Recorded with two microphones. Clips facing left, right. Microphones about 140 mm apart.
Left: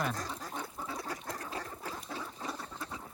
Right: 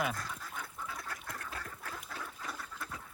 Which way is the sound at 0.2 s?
30° left (ahead or behind).